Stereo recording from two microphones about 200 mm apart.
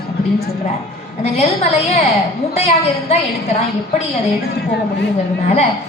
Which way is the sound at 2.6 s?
30° left (ahead or behind).